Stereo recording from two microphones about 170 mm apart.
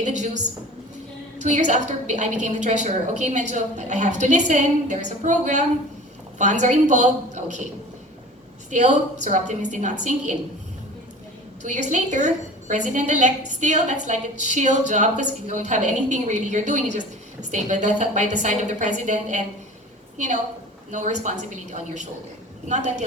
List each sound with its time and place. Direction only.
0.0 s a sound: 45° right (ahead or behind)
1.4 s a woman's voice: 45° right (ahead or behind)
8.7 s a woman's voice: 45° right (ahead or behind)
11.6 s a woman's voice: 45° right (ahead or behind)